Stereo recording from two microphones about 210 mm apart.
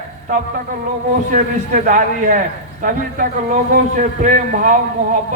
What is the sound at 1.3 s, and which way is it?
A man's voice, 40° right (ahead or behind).